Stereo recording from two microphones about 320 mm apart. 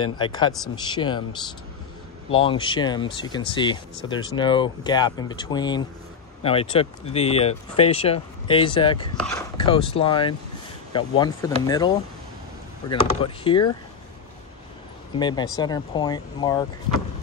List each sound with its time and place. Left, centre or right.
0.0 s speech: centre
2.3 s speech: centre
13.2 s speech: centre
15.1 s speech: centre